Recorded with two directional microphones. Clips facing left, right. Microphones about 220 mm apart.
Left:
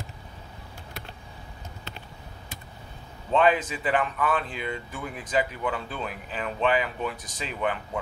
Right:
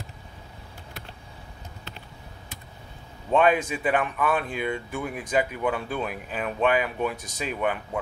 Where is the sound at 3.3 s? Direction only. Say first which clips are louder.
Right 1 dB; 10° right (ahead or behind).